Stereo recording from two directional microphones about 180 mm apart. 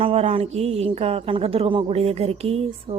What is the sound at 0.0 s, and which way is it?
A woman's voice, 35° right (ahead or behind).